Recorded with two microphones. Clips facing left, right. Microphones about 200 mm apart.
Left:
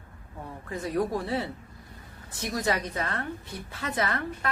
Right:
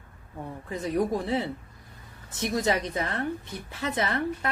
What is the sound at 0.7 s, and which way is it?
Speech, 20° right (ahead or behind).